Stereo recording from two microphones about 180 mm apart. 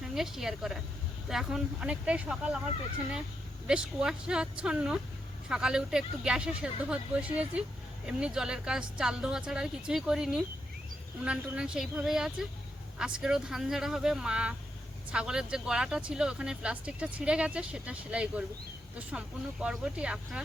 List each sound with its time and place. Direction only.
0.0 s speech: centre (ahead or behind)
3.7 s speech: 5° right (ahead or behind)